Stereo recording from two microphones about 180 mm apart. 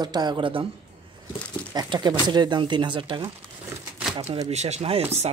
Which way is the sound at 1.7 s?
25° right (ahead or behind).